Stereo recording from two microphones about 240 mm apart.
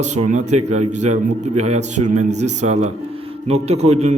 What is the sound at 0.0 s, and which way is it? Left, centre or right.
A man's voice, right.